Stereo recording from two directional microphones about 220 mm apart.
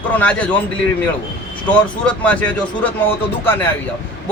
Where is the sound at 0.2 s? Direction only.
5° left (ahead or behind).